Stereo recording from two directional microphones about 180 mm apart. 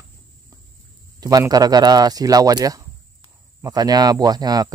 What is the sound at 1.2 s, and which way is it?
Speech, 20° right (ahead or behind).